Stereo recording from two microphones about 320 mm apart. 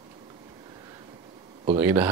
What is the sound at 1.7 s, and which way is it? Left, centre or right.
Speech, centre.